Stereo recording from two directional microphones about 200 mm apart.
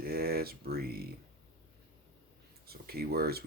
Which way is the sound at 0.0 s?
50° right (ahead or behind).